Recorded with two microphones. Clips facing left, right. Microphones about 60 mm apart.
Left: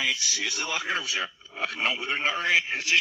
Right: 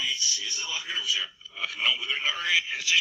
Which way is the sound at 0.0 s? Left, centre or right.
Left.